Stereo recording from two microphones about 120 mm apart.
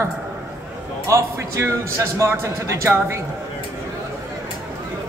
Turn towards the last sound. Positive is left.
turn(degrees=-25)  # may be behind; listen again after turning